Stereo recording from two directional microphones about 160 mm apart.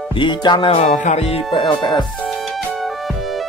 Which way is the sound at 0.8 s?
45° left (ahead or behind).